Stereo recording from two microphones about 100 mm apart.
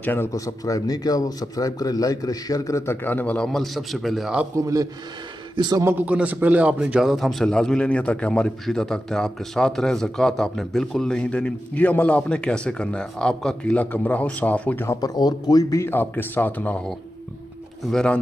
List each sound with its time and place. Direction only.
0.0 s speech: 20° left (ahead or behind)
0.3 s speech: 35° left (ahead or behind); by 3.4 s 15° left (ahead or behind)
3.4 s a man's voice: centre (ahead or behind)
5.6 s a man's voice: 45° right (ahead or behind)
5.9 s a man's voice: 20° right (ahead or behind); by 14.9 s 15° left (ahead or behind)
14.9 s speech: 40° left (ahead or behind)
15.8 s speech: 20° left (ahead or behind)
17.8 s a man's voice: 10° left (ahead or behind)